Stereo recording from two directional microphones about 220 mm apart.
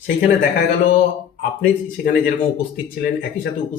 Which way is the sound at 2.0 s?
40° left (ahead or behind).